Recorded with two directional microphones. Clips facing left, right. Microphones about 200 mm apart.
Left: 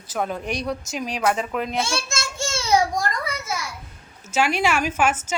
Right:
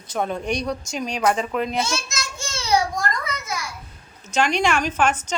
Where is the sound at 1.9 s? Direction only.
30° left (ahead or behind).